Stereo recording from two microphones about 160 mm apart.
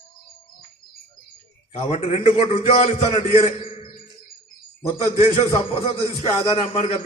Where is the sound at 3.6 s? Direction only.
35° left (ahead or behind).